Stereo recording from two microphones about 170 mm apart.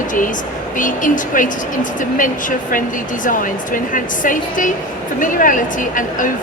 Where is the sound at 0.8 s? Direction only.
50° left (ahead or behind).